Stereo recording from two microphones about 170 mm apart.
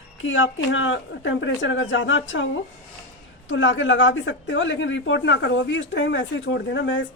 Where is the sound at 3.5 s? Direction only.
90° left.